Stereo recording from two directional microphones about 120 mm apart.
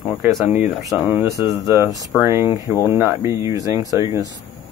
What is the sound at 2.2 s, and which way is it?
Speech, 25° right (ahead or behind).